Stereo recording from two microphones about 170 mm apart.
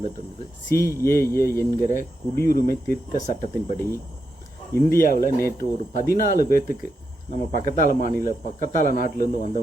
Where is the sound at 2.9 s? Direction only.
45° left (ahead or behind).